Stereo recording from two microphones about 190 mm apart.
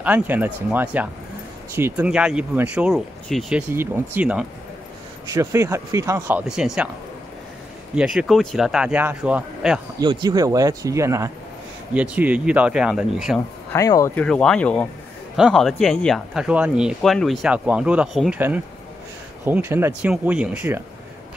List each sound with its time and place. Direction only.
0.0 s speech: 10° right (ahead or behind)
7.9 s speech: 5° right (ahead or behind)
9.9 s speech: 20° right (ahead or behind); by 13.4 s 5° right (ahead or behind)
13.7 s speech: 15° left (ahead or behind); by 18.4 s centre (ahead or behind)
19.4 s speech: 10° right (ahead or behind)